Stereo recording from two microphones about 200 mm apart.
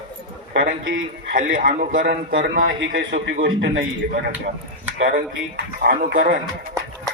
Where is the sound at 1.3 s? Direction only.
40° right (ahead or behind).